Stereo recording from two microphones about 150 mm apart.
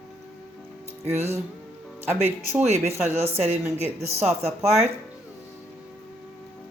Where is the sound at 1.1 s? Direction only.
45° right (ahead or behind).